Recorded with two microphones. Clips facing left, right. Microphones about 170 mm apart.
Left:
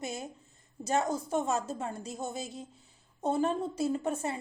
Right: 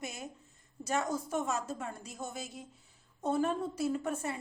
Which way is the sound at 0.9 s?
25° left (ahead or behind).